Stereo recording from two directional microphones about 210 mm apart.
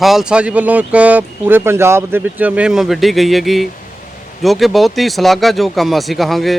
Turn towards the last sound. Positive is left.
turn(degrees=0)  # may be behind; listen again after turning